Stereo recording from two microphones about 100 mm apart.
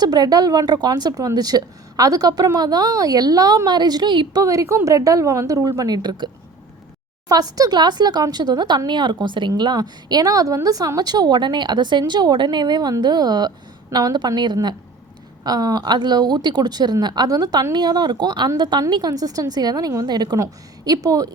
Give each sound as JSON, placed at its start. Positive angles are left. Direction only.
{"t": 0.0, "sound": "a woman's voice", "side_deg": -45}
{"t": 4.4, "sound": "a woman's voice", "side_deg": -30}